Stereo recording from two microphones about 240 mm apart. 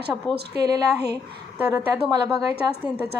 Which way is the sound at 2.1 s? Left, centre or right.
Centre.